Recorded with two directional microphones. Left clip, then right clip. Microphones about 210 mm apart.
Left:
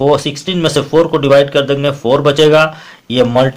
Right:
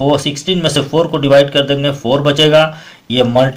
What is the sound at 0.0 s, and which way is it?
Speech, 30° left (ahead or behind).